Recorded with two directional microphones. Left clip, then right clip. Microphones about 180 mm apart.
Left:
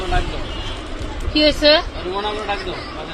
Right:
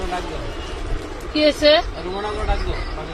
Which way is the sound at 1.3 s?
Centre (ahead or behind).